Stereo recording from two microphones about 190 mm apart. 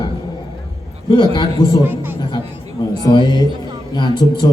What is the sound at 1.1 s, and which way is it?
Speech, 25° left (ahead or behind).